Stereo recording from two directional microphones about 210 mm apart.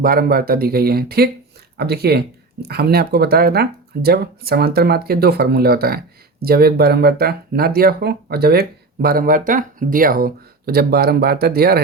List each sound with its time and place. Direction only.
0.0 s speech: 45° right (ahead or behind)